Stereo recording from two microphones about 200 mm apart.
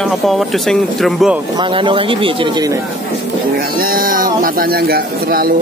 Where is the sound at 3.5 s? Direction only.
45° right (ahead or behind).